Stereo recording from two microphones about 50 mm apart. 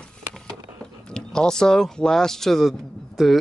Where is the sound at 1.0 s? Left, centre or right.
Centre.